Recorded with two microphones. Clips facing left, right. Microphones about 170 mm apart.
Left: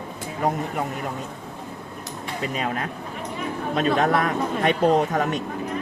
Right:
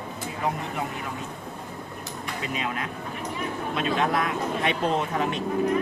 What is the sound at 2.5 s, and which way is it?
Speech, 40° left (ahead or behind).